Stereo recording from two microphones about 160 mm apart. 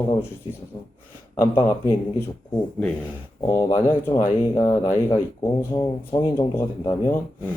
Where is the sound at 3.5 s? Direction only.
20° left (ahead or behind).